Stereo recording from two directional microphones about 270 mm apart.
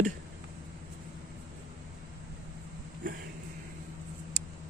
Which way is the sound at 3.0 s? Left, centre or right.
Right.